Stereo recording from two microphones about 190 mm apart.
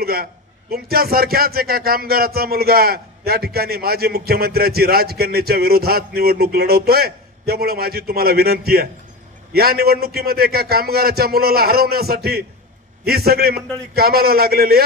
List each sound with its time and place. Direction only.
0.0 s a man's voice: 55° right (ahead or behind)